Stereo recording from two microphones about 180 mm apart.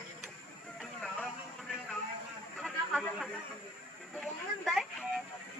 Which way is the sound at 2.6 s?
Centre (ahead or behind).